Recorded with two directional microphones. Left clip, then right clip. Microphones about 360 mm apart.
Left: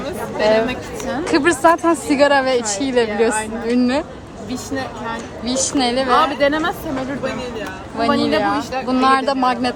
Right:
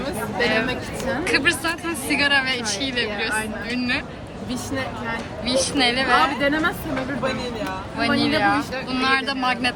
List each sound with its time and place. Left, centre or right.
0.3 s a woman's voice: centre
5.7 s a woman's voice: centre
7.9 s a woman's voice: centre